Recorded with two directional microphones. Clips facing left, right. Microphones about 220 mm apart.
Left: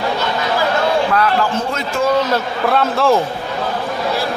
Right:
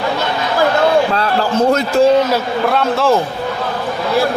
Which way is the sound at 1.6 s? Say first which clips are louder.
Right 8 dB; 40° right (ahead or behind).